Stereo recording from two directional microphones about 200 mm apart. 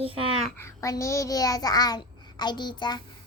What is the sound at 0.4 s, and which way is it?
A child's voice, 10° left (ahead or behind).